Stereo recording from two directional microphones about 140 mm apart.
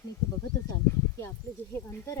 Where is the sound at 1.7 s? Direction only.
15° left (ahead or behind).